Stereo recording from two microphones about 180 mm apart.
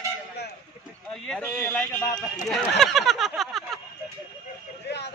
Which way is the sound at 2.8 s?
Centre (ahead or behind).